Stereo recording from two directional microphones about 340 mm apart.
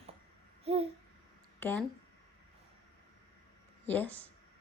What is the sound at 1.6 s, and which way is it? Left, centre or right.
Speech, centre.